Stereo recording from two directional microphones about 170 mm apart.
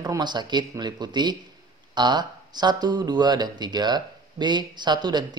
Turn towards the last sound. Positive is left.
turn(degrees=-25)  # may be behind; listen again after turning